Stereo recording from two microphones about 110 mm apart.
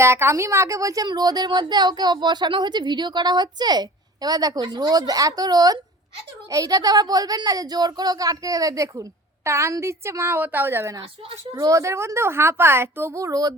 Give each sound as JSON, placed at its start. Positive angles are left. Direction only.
{"t": 0.0, "sound": "a woman's voice", "side_deg": -25}